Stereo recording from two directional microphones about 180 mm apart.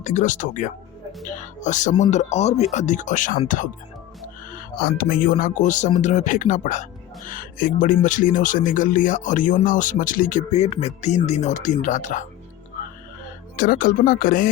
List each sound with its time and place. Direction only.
0.0 s speech: 45° left (ahead or behind)
13.6 s speech: 50° left (ahead or behind)